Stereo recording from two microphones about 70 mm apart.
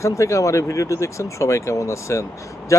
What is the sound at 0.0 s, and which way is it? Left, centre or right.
Speech, left.